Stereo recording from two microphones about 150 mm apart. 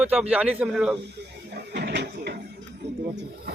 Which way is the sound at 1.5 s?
90° right.